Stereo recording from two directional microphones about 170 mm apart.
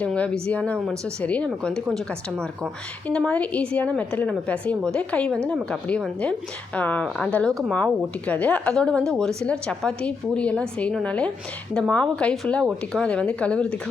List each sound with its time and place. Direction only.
0.0 s a woman's voice: 5° left (ahead or behind)